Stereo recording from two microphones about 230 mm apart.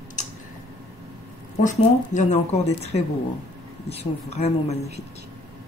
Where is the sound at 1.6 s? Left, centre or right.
Left.